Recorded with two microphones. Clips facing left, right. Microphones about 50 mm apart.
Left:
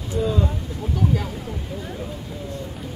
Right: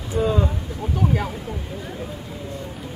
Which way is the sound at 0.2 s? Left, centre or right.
Right.